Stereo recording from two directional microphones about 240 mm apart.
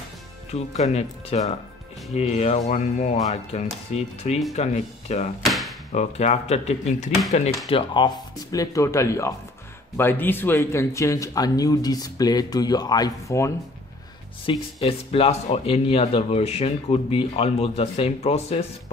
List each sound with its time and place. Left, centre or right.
0.5 s speech: left
5.4 s a sound: centre
5.9 s speech: left
14.4 s speech: left